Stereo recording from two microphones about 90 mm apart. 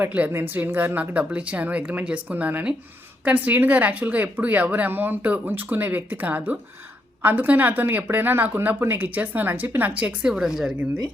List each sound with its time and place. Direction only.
0.0 s speech: 20° right (ahead or behind); by 10.8 s 5° right (ahead or behind)